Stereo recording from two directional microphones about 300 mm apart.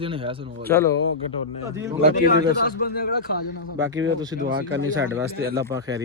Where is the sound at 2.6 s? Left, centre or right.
Left.